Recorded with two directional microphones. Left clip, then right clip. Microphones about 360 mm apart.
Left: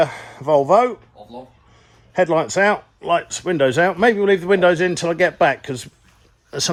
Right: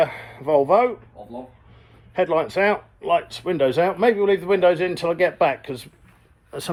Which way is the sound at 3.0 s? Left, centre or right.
Left.